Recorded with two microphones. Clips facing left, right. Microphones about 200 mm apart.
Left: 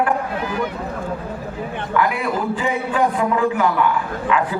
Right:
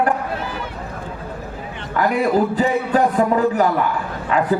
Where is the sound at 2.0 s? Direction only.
40° right (ahead or behind).